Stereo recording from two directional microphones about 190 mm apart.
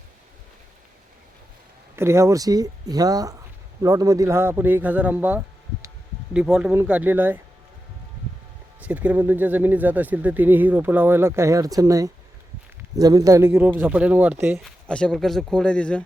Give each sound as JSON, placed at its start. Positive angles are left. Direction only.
{"t": 2.0, "sound": "speech", "side_deg": -15}
{"t": 8.8, "sound": "speech", "side_deg": -10}
{"t": 14.6, "sound": "speech", "side_deg": 5}